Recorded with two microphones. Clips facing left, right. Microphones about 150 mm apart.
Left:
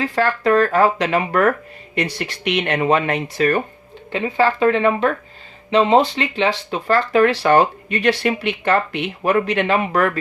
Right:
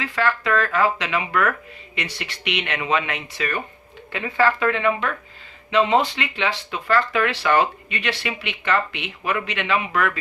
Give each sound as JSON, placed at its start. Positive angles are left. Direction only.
{"t": 0.0, "sound": "speech", "side_deg": 40}
{"t": 4.1, "sound": "speech", "side_deg": 25}